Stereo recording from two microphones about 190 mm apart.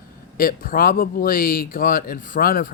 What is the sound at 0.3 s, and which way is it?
Speech, 50° left (ahead or behind).